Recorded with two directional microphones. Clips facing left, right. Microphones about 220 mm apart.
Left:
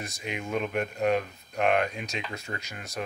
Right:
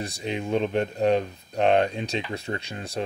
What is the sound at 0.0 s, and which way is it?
Speech, 30° right (ahead or behind).